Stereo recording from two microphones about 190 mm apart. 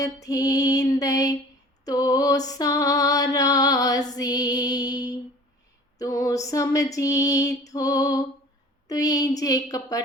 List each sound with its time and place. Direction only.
0.0 s female singing: 20° left (ahead or behind)